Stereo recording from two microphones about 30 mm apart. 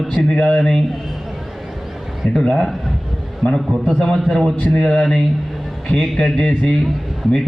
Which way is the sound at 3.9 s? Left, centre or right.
Centre.